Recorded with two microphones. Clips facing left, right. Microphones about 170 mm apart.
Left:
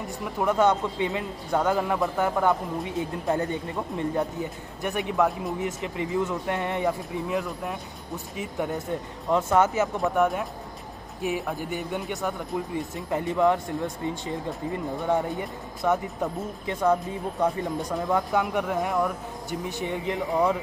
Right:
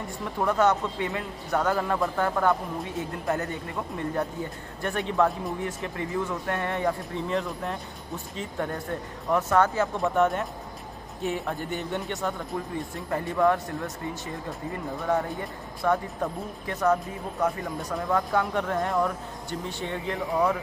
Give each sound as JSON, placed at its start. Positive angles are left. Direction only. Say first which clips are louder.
{"t": 0.2, "sound": "speech", "louder": "left 1 dB", "side_deg": 10}
{"t": 9.9, "sound": "speech", "louder": "right 2 dB", "side_deg": 0}
{"t": 15.0, "sound": "speech", "louder": "left 1 dB", "side_deg": 20}